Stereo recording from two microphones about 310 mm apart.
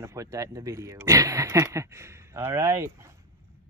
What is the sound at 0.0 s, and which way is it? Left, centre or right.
Speech, centre.